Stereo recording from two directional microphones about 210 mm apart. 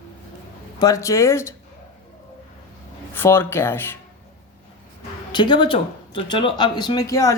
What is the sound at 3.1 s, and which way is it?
Speech, 10° left (ahead or behind).